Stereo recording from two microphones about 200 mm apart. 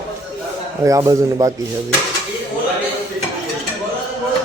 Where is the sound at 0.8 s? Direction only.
15° right (ahead or behind).